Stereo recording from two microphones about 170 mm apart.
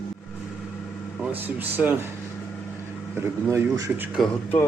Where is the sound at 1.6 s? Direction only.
10° right (ahead or behind).